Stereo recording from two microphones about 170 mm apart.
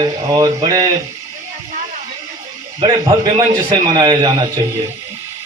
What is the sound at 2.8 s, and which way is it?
A man's voice, 25° right (ahead or behind).